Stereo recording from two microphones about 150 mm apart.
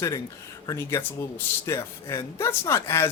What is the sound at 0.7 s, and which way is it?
A man's voice, 15° left (ahead or behind).